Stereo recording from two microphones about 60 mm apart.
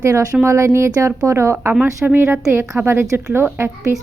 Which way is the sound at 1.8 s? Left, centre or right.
Right.